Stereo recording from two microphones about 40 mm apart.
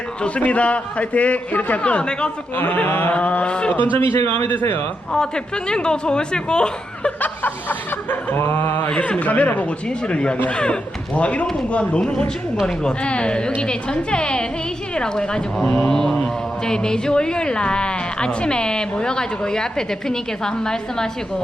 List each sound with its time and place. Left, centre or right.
0.2 s a man's voice: left
1.8 s a woman's voice: left
2.8 s a sound: left
3.2 s a woman's voice: left
3.9 s a man's voice: left
5.1 s a woman's voice: left
7.2 s chuckle: left
9.0 s a man's voice: left
10.1 s a woman's voice: left
15.9 s mantra: centre
16.6 s a woman's voice: centre